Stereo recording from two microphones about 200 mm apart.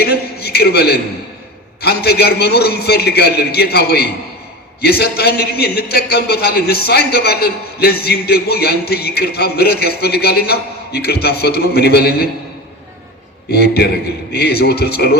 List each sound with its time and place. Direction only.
0.0 s a man's voice: 50° left (ahead or behind)
13.5 s a man's voice: 55° left (ahead or behind)